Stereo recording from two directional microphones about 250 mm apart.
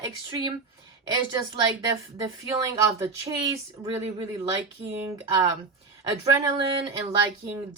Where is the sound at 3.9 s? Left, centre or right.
Right.